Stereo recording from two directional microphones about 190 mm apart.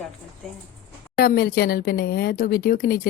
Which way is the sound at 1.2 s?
50° left (ahead or behind).